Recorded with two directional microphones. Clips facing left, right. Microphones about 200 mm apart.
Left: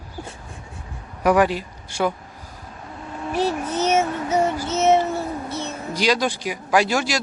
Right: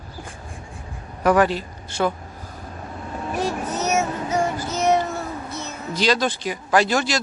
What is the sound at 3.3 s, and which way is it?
Vehicle, 30° left (ahead or behind).